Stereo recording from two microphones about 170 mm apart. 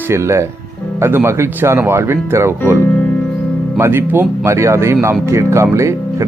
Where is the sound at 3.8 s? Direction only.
15° right (ahead or behind).